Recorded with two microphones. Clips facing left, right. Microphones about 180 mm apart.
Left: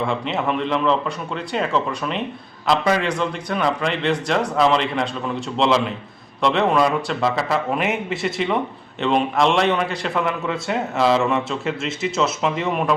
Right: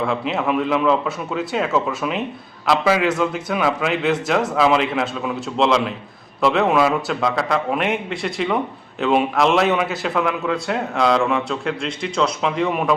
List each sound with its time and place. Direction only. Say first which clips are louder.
0.0 s a man's voice: right 1 dB; centre (ahead or behind)